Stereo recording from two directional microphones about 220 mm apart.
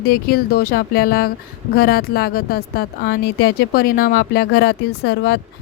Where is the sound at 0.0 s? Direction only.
45° left (ahead or behind).